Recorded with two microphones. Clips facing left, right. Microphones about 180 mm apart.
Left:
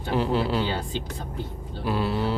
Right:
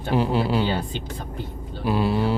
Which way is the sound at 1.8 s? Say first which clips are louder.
Right 4 dB; 15° right (ahead or behind).